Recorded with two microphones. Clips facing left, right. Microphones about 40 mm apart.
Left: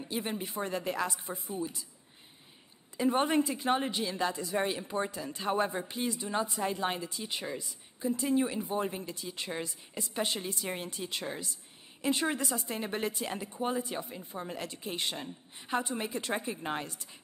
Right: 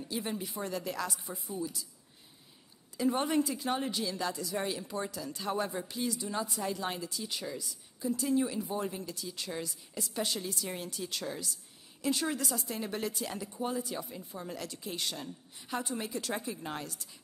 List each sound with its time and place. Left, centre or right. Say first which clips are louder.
0.0 s a woman's voice: left 1 dB; left
3.0 s a woman's voice: left 2 dB; left